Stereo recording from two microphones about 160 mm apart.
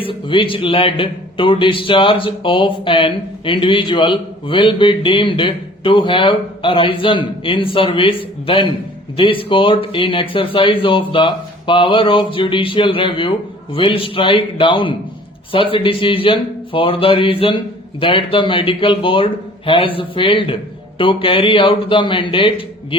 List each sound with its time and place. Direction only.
0.0 s a man's voice: 35° left (ahead or behind)